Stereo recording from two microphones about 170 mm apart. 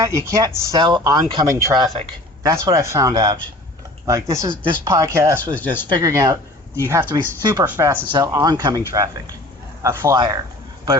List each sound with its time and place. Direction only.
0.0 s speech: 15° right (ahead or behind)
5.5 s speech: 10° left (ahead or behind)
5.9 s speech: 20° right (ahead or behind)
7.1 s speech: 25° right (ahead or behind)
9.8 s speech: 15° right (ahead or behind)